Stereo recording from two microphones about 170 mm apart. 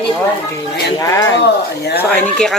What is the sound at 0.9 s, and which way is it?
Speech, 20° left (ahead or behind).